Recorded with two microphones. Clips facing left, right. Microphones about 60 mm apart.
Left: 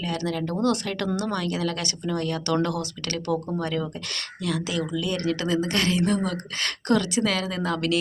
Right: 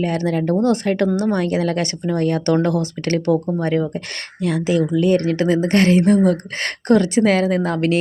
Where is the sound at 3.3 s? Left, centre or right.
Centre.